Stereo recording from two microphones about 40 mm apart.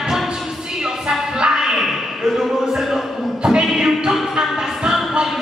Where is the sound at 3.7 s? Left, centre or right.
Centre.